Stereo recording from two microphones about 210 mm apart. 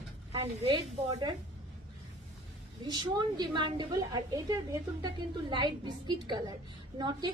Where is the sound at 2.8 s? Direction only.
20° right (ahead or behind).